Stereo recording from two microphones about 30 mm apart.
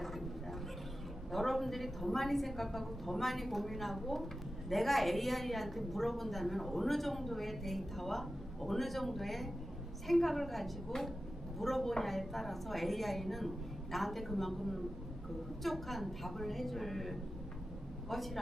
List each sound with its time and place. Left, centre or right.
1.3 s a woman's voice: centre
15.6 s a woman's voice: centre